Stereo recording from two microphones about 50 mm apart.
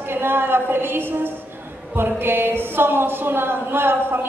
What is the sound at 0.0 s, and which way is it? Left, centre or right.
A woman's voice, right.